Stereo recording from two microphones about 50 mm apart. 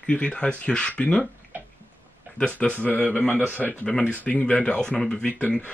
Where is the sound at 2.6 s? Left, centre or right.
Left.